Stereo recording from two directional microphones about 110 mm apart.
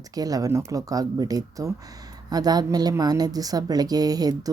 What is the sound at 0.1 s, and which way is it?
Speech, 35° right (ahead or behind).